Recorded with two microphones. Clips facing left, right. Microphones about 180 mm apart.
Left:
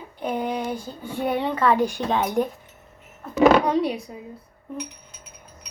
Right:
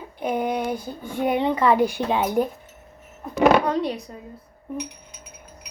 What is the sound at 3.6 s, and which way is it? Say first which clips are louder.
Speech: left 2 dB; 10° left (ahead or behind).